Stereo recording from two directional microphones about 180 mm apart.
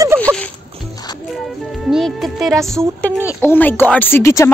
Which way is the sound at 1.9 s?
Centre (ahead or behind).